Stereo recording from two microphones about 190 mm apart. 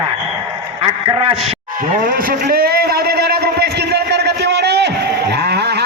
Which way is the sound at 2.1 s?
55° right (ahead or behind).